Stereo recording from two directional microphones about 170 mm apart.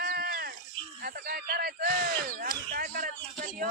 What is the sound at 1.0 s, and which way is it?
Speech, 60° right (ahead or behind).